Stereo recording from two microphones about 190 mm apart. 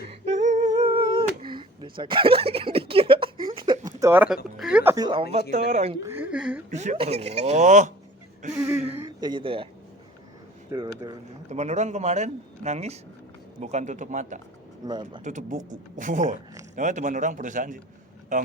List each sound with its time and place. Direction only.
0.1 s humming: 35° right (ahead or behind)
0.7 s a sound: 25° right (ahead or behind)
3.8 s speech: 15° right (ahead or behind)
5.0 s speech: 30° right (ahead or behind)
6.0 s speech: 10° right (ahead or behind)
6.7 s speech: 35° right (ahead or behind)
8.5 s a sound: 5° right (ahead or behind)
9.0 s speech: 25° right (ahead or behind)
10.7 s speech: 20° right (ahead or behind)
11.4 s speech: 35° right (ahead or behind)
14.8 s speech: 25° right (ahead or behind)
15.2 s speech: 40° right (ahead or behind)